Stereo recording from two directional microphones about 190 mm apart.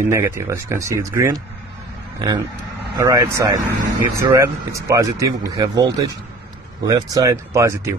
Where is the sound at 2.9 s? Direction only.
15° right (ahead or behind).